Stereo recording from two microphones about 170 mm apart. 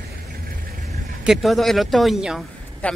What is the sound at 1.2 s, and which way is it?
Speech, centre (ahead or behind).